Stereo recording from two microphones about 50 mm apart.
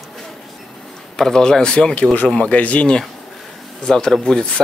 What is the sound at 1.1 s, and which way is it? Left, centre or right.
Speech, centre.